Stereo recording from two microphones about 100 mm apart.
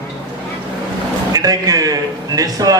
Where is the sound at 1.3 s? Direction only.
40° right (ahead or behind).